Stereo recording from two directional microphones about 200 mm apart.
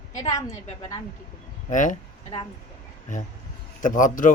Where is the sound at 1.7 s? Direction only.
40° left (ahead or behind).